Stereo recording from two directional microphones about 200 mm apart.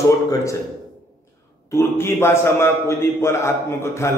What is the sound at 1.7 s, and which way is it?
A man's voice, 15° left (ahead or behind).